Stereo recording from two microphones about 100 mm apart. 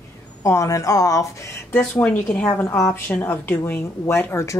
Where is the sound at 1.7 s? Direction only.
20° left (ahead or behind).